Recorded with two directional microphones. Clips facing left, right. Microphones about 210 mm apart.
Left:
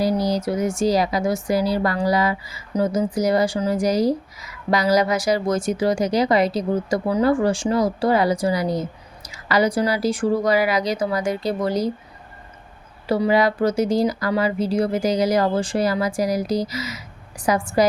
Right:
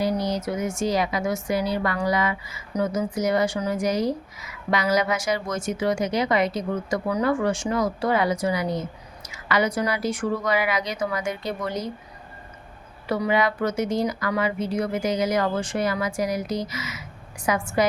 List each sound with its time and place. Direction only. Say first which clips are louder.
0.2 s speech: left 4 dB; 35° left (ahead or behind)
13.1 s speech: left 4 dB; 30° left (ahead or behind)